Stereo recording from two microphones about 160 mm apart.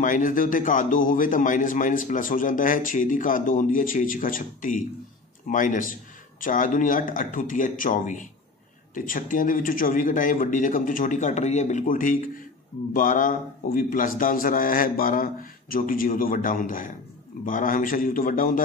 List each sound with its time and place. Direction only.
0.0 s a man's voice: 55° left (ahead or behind)